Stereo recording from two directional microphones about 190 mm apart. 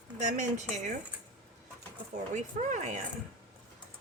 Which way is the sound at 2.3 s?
40° right (ahead or behind).